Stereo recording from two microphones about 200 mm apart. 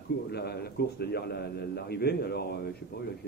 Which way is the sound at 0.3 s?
55° left (ahead or behind).